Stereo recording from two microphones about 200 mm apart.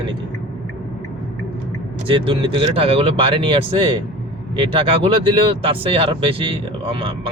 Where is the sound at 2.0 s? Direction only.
25° right (ahead or behind).